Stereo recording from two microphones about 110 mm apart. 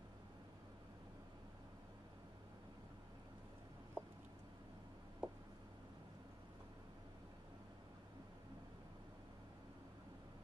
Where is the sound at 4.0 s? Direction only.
15° right (ahead or behind).